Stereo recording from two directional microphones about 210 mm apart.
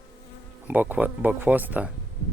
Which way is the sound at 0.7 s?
10° right (ahead or behind).